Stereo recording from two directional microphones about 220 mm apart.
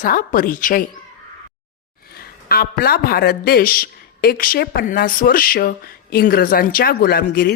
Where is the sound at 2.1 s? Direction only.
45° left (ahead or behind).